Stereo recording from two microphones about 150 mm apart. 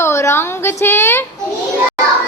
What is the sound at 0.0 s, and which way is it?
A woman's voice, 20° left (ahead or behind).